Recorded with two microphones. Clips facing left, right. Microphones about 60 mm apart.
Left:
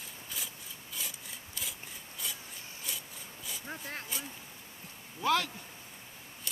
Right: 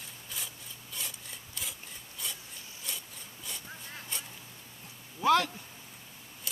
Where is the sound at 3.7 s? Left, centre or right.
Left.